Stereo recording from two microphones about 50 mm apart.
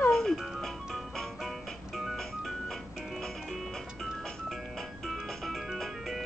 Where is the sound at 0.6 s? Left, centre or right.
Centre.